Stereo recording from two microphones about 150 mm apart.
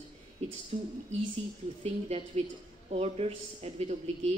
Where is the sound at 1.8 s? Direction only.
40° right (ahead or behind).